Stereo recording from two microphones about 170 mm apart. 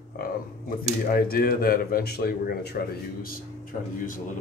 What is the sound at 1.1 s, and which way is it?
Speech, 60° left (ahead or behind).